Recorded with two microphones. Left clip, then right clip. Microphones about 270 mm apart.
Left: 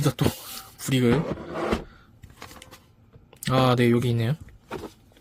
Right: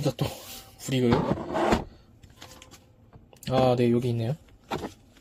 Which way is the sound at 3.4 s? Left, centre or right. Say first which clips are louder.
Left 1 dB; left.